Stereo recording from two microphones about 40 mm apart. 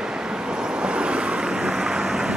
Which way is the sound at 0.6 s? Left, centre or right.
Centre.